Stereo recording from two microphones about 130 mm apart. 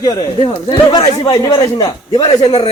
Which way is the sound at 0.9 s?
45° left (ahead or behind).